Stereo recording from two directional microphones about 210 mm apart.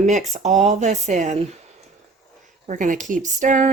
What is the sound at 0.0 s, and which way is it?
Speech, 35° right (ahead or behind).